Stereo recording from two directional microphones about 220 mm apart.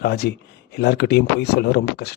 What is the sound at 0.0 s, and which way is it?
A man's voice, 50° left (ahead or behind).